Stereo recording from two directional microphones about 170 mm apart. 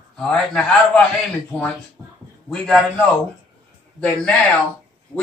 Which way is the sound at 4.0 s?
10° left (ahead or behind).